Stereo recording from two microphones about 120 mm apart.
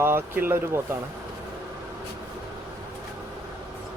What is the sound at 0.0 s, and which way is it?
Speech, 20° right (ahead or behind).